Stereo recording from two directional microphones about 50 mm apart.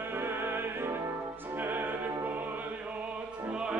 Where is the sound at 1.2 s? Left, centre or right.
Right.